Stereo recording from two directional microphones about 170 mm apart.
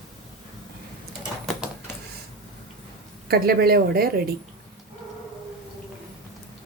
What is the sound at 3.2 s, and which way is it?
Speech, 60° right (ahead or behind).